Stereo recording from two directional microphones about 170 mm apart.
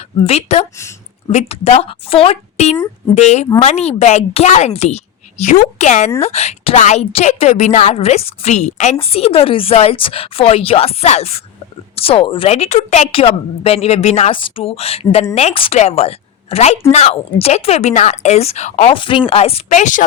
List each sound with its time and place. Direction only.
0.3 s a woman's voice: 35° left (ahead or behind)
18.9 s a woman's voice: 30° left (ahead or behind); by 20.1 s 45° left (ahead or behind)